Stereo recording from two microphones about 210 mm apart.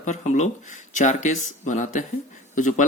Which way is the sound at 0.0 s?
35° left (ahead or behind).